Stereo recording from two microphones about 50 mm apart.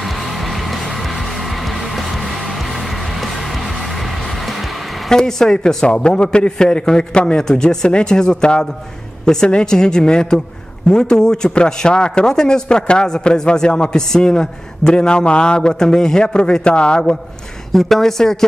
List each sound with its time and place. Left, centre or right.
5.1 s a man's voice: centre
17.7 s a man's voice: centre